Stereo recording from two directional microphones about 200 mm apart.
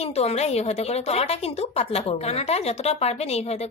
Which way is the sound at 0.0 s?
30° left (ahead or behind).